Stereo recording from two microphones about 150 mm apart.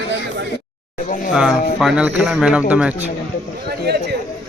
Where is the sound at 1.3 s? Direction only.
5° right (ahead or behind).